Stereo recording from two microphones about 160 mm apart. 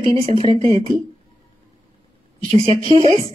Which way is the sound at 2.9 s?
35° right (ahead or behind).